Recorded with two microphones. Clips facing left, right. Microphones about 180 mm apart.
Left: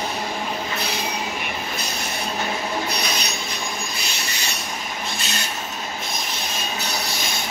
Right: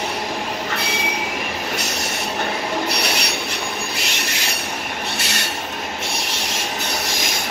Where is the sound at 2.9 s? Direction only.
85° right.